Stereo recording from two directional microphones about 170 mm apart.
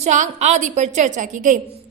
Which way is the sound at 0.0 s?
45° right (ahead or behind).